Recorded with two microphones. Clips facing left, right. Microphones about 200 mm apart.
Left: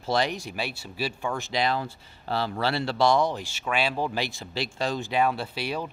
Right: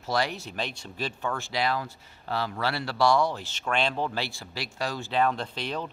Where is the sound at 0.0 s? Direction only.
20° left (ahead or behind).